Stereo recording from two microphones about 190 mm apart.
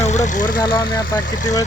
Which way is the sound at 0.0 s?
40° left (ahead or behind).